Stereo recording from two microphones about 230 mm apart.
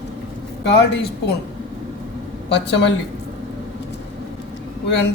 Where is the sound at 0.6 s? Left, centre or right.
Left.